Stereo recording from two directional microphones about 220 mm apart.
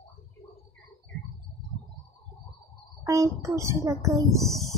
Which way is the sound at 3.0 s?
15° right (ahead or behind).